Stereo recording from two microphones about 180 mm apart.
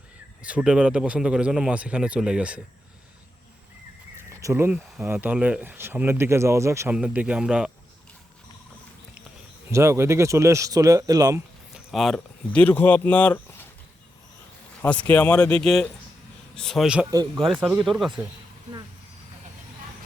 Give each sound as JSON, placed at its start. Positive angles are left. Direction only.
{"t": 0.4, "sound": "a man's voice", "side_deg": -5}
{"t": 4.3, "sound": "speech", "side_deg": -15}
{"t": 9.6, "sound": "speech", "side_deg": -15}
{"t": 11.9, "sound": "speech", "side_deg": 0}
{"t": 14.8, "sound": "a man's voice", "side_deg": 10}
{"t": 17.1, "sound": "speech", "side_deg": -20}
{"t": 17.5, "sound": "a man's voice", "side_deg": -5}